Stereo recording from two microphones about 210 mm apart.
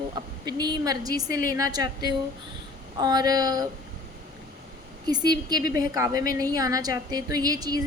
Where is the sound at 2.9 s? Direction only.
20° right (ahead or behind).